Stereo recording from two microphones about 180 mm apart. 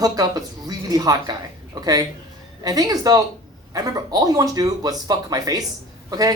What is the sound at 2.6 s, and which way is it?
Speech, 20° right (ahead or behind).